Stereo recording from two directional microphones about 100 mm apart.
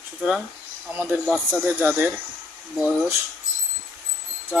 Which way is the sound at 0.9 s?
20° right (ahead or behind).